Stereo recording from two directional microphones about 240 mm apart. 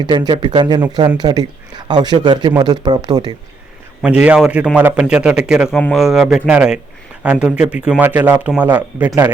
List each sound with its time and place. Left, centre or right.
0.0 s speech: centre
4.0 s a man's voice: centre